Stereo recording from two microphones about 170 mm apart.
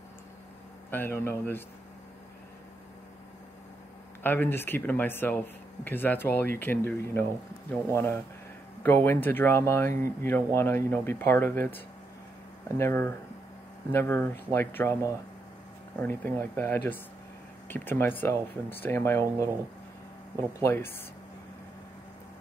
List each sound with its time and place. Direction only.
0.8 s speech: 10° left (ahead or behind)
4.2 s speech: 10° left (ahead or behind)
9.8 s speech: 50° right (ahead or behind)
10.2 s speech: 15° left (ahead or behind)
16.0 s speech: 10° left (ahead or behind)
20.5 s speech: 15° left (ahead or behind)